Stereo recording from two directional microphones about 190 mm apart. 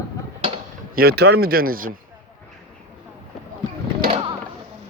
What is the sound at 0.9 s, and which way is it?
Speech, 55° right (ahead or behind).